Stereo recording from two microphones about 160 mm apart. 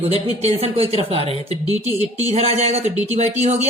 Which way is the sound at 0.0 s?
40° right (ahead or behind).